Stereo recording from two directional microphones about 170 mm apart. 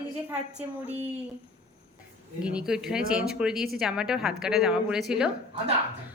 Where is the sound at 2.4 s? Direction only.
5° right (ahead or behind).